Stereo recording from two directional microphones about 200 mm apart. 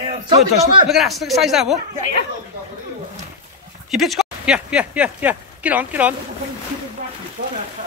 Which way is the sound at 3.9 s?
Centre (ahead or behind).